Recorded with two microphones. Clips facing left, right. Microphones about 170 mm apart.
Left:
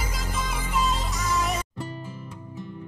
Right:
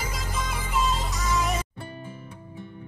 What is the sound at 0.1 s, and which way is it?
Music, centre (ahead or behind).